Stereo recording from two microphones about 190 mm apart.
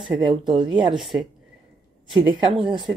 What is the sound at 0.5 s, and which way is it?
Speech, 25° right (ahead or behind).